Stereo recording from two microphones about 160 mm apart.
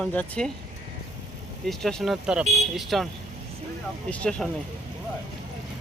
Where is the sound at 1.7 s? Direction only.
Centre (ahead or behind).